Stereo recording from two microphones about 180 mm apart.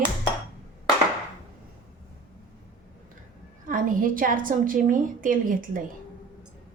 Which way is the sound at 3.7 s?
50° right (ahead or behind).